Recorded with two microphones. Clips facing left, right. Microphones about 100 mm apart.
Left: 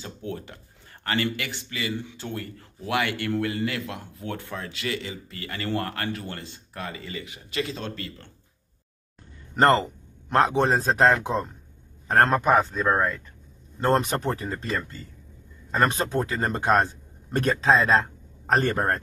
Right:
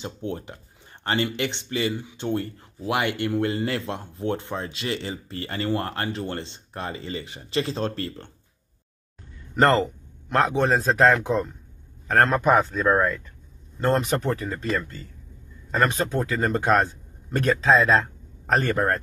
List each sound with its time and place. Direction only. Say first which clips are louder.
0.0 s speech: right 3 dB; 25° right (ahead or behind)
5.7 s speech: right 1 dB; 20° right (ahead or behind); by 8.3 s 40° right (ahead or behind)
9.6 s speech: even; 25° left (ahead or behind)
13.9 s a man's voice: right 1 dB; 30° left (ahead or behind)